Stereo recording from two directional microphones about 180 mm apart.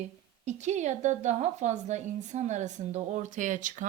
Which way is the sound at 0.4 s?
40° right (ahead or behind).